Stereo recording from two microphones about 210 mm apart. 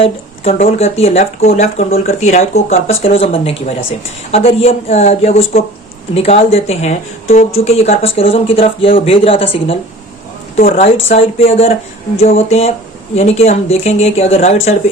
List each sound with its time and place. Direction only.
0.0 s speech: 30° left (ahead or behind)
10.6 s a woman's voice: 40° left (ahead or behind)
11.1 s speech: 30° left (ahead or behind)